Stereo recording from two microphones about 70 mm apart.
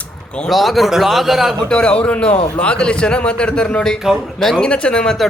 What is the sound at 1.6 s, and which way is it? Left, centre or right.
A man's voice, centre.